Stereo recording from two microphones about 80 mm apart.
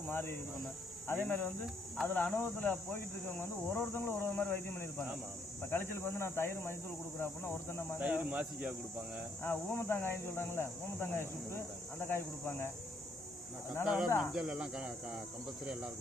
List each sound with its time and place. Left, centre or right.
0.1 s speech: left
8.0 s speech: centre
9.4 s speech: left
13.8 s speech: centre